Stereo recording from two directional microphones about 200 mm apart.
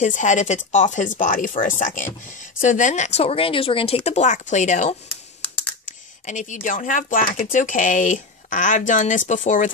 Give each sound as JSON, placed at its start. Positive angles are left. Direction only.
{"t": 0.0, "sound": "speech", "side_deg": 40}